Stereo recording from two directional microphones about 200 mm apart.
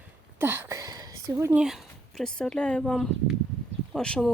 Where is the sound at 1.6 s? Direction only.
Centre (ahead or behind).